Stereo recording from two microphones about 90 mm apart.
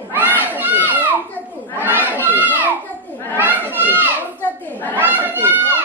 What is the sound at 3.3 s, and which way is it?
Speech, 20° right (ahead or behind).